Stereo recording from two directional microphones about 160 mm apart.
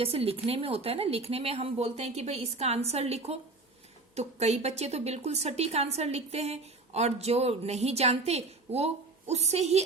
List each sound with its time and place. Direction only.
0.0 s a woman's voice: 35° right (ahead or behind)